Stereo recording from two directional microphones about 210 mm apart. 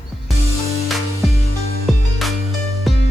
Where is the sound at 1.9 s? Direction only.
Centre (ahead or behind).